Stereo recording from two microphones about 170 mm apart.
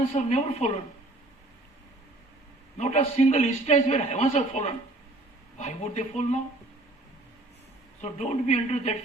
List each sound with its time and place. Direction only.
0.1 s a man's voice: 40° left (ahead or behind)
2.7 s a man's voice: 40° left (ahead or behind)
8.0 s speech: 40° left (ahead or behind)